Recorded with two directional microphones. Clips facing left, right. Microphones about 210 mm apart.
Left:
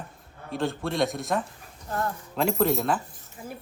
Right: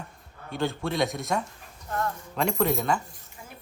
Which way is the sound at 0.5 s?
Centre (ahead or behind).